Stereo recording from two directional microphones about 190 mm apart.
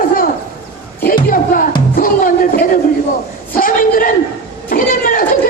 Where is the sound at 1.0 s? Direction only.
50° left (ahead or behind).